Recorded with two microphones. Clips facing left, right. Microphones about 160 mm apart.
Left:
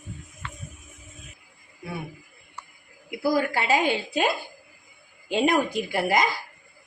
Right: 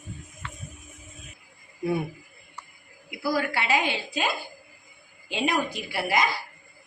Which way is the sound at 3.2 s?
45° left (ahead or behind).